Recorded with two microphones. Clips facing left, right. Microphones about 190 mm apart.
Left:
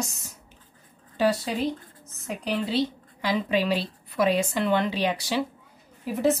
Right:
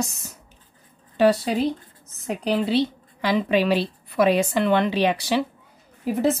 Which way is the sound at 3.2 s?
70° right (ahead or behind).